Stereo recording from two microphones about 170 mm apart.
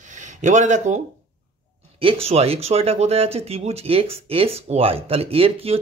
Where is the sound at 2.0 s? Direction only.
35° right (ahead or behind).